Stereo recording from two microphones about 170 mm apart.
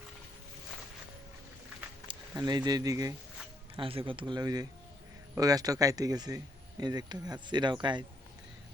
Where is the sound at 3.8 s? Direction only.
30° right (ahead or behind).